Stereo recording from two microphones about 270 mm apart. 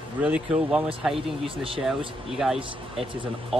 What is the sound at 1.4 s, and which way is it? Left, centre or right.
Speech, centre.